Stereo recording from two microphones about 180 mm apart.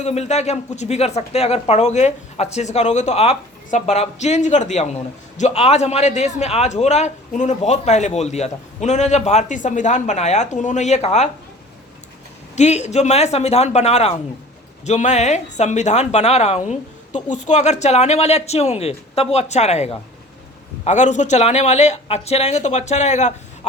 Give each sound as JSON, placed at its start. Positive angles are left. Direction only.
{"t": 0.0, "sound": "a man's voice", "side_deg": 40}
{"t": 12.5, "sound": "a man's voice", "side_deg": 40}